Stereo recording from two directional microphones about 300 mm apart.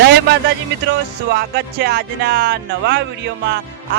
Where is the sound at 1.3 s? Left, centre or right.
Right.